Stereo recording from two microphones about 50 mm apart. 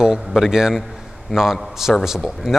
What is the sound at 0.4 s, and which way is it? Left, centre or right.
A man's voice, centre.